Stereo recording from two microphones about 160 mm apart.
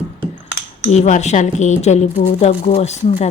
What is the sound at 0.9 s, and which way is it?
Speech, 45° left (ahead or behind).